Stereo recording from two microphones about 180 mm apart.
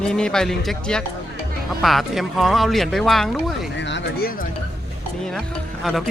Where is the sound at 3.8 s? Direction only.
80° left; by 4.4 s 55° left (ahead or behind).